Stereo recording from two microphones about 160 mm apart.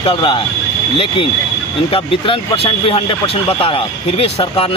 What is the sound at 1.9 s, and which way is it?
Speech, 35° left (ahead or behind).